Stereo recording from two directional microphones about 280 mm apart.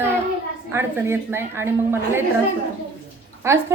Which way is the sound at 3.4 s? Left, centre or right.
Centre.